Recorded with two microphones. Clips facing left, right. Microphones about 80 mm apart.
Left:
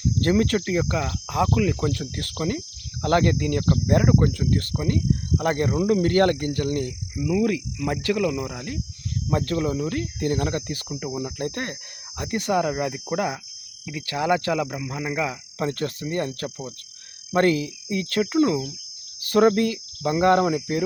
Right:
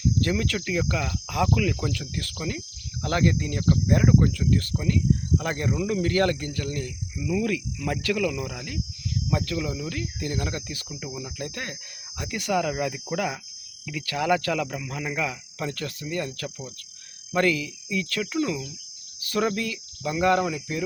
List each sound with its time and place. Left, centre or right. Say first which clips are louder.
0.0 s cricket: left 4 dB; left
1.3 s speech: left 2 dB; left
3.8 s cricket: left 1 dB; left
7.3 s cricket: left 4 dB; left
7.9 s speech: left 3 dB; left
9.3 s cricket: left 5 dB; left
13.8 s speech: left 1 dB; left
17.3 s cricket: left 3 dB; left